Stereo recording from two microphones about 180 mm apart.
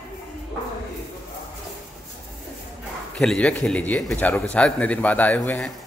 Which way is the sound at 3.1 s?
5° left (ahead or behind).